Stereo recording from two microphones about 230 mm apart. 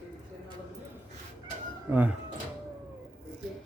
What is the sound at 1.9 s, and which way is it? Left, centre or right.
Speech, centre.